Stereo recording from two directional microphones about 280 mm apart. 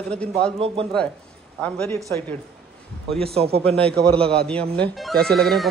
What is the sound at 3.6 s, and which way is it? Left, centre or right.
Speech, centre.